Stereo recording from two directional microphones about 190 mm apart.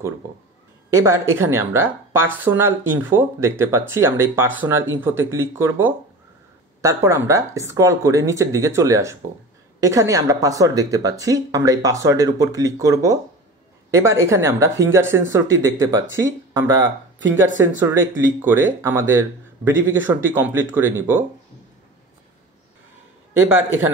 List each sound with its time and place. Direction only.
0.8 s speech: 15° right (ahead or behind)